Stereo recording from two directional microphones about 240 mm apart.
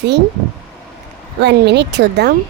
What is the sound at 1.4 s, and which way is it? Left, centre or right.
Speech, right.